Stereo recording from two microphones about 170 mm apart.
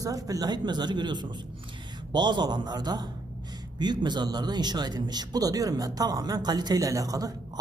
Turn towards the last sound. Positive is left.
turn(degrees=-20)  # may be behind; listen again after turning